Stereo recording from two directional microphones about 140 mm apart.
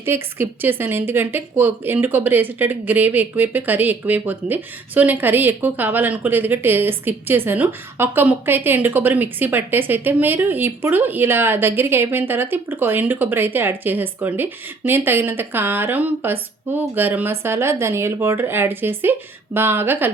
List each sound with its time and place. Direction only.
0.0 s a woman's voice: 15° right (ahead or behind)